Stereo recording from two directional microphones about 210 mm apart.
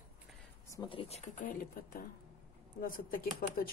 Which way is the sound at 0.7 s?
20° left (ahead or behind).